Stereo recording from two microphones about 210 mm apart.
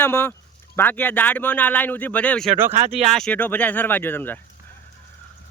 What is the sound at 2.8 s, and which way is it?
Speech, 30° right (ahead or behind).